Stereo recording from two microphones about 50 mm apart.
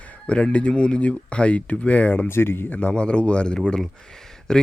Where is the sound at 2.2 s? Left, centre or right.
Left.